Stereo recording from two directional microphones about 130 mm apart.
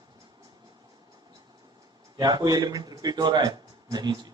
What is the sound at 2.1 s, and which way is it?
A man's voice, 30° right (ahead or behind).